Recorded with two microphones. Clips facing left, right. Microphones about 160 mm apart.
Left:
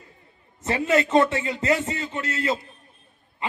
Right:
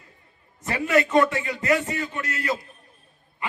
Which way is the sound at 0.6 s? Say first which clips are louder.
Even; 20° left (ahead or behind).